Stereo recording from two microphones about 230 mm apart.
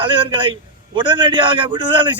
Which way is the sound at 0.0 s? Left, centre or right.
Right.